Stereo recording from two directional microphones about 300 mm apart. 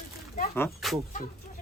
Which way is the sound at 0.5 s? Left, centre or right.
Centre.